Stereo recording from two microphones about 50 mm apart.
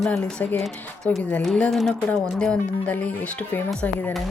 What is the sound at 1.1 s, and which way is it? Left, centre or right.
Speech, left.